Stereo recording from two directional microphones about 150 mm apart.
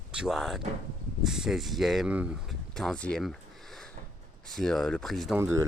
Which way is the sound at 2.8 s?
5° left (ahead or behind).